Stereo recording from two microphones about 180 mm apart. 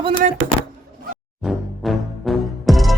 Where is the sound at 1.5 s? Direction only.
Centre (ahead or behind).